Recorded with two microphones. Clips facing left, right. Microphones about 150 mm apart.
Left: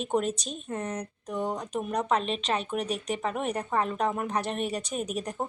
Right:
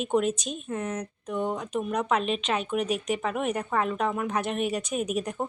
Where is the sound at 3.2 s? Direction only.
Centre (ahead or behind).